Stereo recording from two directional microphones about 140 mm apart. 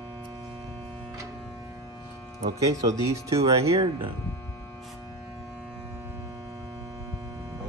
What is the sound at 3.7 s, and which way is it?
Speech, 40° right (ahead or behind).